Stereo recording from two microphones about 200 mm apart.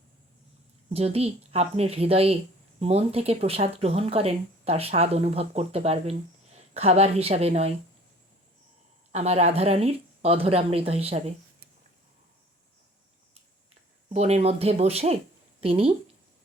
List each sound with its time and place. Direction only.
0.9 s speech: 30° right (ahead or behind)
9.1 s speech: 30° right (ahead or behind)
14.1 s speech: 30° right (ahead or behind)